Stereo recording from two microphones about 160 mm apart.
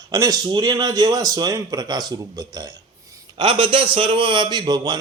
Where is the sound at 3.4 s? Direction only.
35° right (ahead or behind).